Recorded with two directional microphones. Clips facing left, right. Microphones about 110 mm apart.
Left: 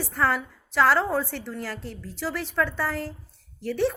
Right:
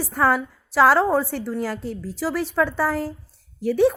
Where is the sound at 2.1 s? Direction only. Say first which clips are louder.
Right 5 dB; 45° right (ahead or behind).